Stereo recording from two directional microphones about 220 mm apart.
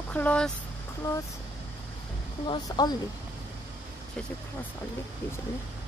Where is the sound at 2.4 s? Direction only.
20° left (ahead or behind).